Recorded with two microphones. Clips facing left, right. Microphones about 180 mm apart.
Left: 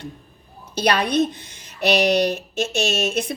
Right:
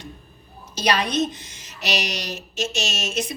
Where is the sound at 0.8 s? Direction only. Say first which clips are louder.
Left 3 dB; 60° left (ahead or behind).